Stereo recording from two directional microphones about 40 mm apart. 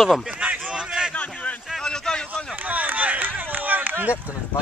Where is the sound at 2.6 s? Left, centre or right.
Right.